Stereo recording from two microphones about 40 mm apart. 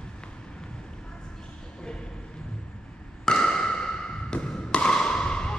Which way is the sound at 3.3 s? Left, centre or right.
Centre.